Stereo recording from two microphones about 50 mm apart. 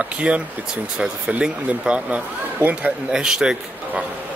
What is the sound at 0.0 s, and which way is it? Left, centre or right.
A man's voice, right.